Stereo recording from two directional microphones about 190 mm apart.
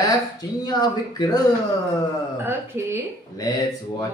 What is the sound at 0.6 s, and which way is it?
Speech, 20° left (ahead or behind).